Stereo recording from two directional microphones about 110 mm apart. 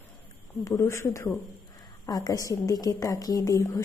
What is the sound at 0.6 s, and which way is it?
A woman's voice, 30° left (ahead or behind).